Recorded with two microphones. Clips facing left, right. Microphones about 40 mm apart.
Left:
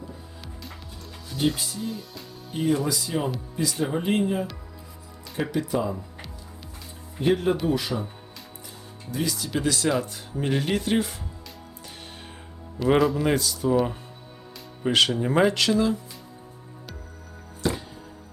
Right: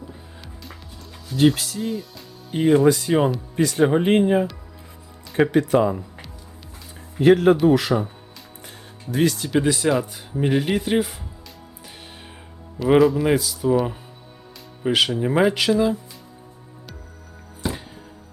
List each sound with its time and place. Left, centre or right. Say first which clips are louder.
1.4 s speech: right 8 dB; right
1.9 s speech: right 6 dB; centre
2.6 s speech: right 9 dB; right
5.5 s speech: right 5 dB; right
7.2 s speech: right 8 dB; right
7.6 s speech: right 8 dB; right
9.1 s speech: right 8 dB; right
9.6 s speech: right 5 dB; centre
9.9 s speech: right 4 dB; centre
12.8 s speech: right 5 dB; centre